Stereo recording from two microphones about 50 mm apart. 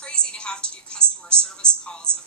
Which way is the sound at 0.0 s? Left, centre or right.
Centre.